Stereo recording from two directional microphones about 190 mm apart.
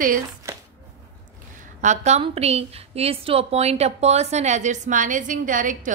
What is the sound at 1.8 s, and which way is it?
A woman's voice, 40° right (ahead or behind).